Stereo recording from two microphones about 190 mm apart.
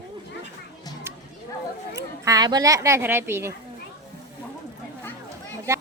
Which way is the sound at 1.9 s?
20° right (ahead or behind).